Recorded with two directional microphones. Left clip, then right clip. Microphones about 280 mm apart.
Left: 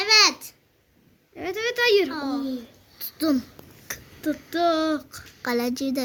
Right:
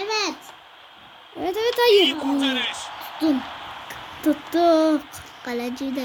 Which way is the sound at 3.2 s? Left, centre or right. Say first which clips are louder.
Right 2 dB; centre.